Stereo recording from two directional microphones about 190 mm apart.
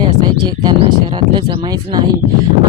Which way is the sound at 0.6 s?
25° right (ahead or behind).